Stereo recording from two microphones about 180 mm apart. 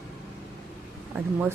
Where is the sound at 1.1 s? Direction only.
10° right (ahead or behind).